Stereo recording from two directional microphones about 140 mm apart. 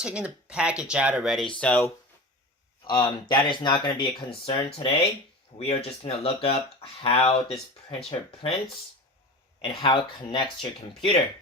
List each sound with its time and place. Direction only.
0.0 s speech: 5° right (ahead or behind)
1.5 s speech: 10° left (ahead or behind)
2.8 s speech: 35° left (ahead or behind)
9.6 s speech: 35° left (ahead or behind)